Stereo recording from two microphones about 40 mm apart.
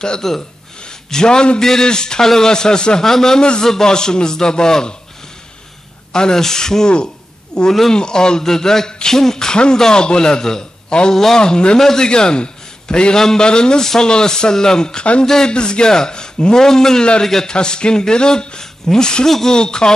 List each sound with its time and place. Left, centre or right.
0.2 s speech: centre
6.1 s a man's voice: centre
19.5 s a man's voice: centre